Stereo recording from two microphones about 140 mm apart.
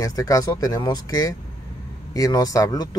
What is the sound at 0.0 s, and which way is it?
Speech, 25° left (ahead or behind).